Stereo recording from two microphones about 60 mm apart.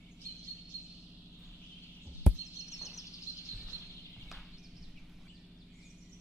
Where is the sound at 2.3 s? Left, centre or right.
Centre.